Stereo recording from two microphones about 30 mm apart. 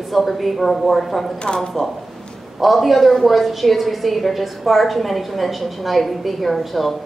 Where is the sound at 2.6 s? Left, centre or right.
Centre.